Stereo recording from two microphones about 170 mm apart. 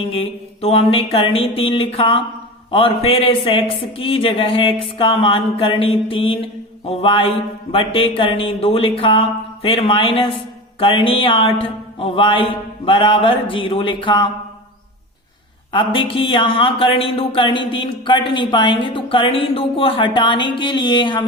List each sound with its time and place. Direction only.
0.0 s speech: 35° left (ahead or behind)
15.7 s speech: 30° left (ahead or behind)